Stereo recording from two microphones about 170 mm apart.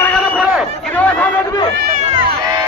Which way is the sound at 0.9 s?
10° left (ahead or behind).